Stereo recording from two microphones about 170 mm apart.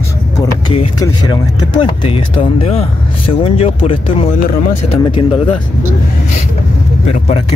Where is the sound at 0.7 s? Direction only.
30° left (ahead or behind).